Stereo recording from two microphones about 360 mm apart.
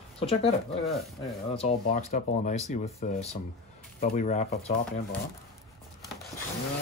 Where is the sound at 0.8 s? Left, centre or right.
Centre.